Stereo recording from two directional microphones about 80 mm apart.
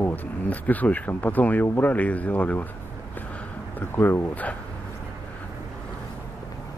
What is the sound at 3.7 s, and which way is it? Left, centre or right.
Speech, left.